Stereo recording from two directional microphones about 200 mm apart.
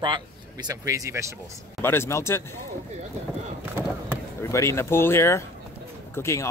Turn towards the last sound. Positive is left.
turn(degrees=15)  # may be behind; listen again after turning